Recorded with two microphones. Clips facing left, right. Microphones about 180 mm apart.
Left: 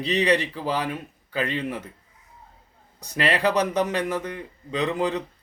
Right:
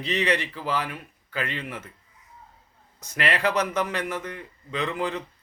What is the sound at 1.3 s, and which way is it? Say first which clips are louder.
Speech: left 4 dB; 35° left (ahead or behind).